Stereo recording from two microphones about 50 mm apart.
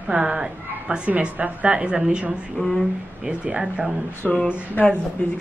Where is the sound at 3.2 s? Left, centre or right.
Centre.